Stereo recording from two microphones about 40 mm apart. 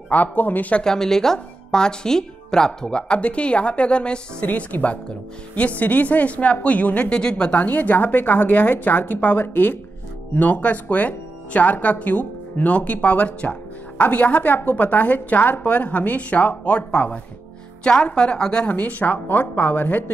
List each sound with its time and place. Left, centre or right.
0.1 s a woman's voice: left
0.8 s speech: centre
4.5 s speech: left
7.1 s speech: left
7.5 s a woman's voice: left
18.1 s speech: left
18.7 s a woman's voice: left